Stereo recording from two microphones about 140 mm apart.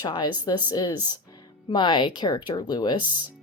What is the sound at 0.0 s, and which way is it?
Speech, 30° left (ahead or behind).